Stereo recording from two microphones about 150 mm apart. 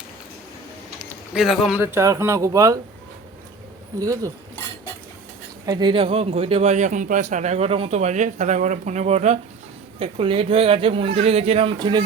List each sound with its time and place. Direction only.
1.3 s speech: centre (ahead or behind)
1.8 s speech: 15° right (ahead or behind)
4.0 s speech: 20° right (ahead or behind)
5.6 s a man's voice: 30° right (ahead or behind)